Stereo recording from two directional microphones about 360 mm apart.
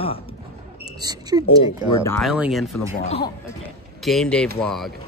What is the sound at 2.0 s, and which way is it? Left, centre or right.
Speech, centre.